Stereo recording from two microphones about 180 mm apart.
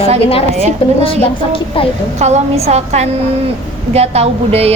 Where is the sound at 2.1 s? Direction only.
40° right (ahead or behind).